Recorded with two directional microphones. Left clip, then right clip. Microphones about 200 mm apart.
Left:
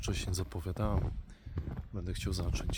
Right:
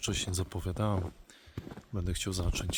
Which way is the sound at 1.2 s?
25° right (ahead or behind).